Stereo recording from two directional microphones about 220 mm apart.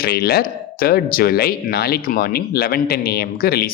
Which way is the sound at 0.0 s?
45° left (ahead or behind).